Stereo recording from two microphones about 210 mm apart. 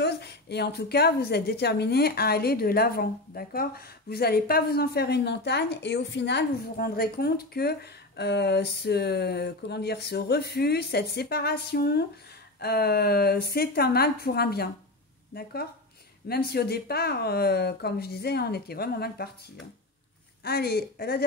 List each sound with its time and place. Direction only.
0.0 s a woman's voice: 50° left (ahead or behind)
20.4 s a woman's voice: 50° left (ahead or behind)